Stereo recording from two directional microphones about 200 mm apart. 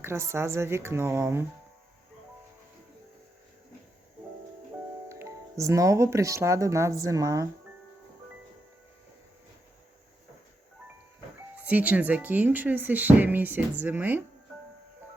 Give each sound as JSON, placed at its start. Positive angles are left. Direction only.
{"t": 0.0, "sound": "speech", "side_deg": -15}
{"t": 5.0, "sound": "speech", "side_deg": -15}
{"t": 11.5, "sound": "speech", "side_deg": -5}